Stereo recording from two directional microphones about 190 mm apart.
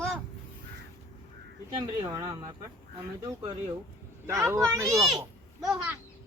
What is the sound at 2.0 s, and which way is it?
Speech, 15° right (ahead or behind).